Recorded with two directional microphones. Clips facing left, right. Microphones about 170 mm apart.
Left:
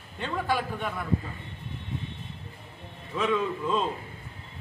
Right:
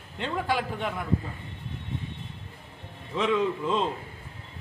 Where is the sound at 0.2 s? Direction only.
15° right (ahead or behind).